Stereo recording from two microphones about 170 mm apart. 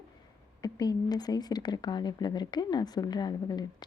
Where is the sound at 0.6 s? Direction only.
25° left (ahead or behind).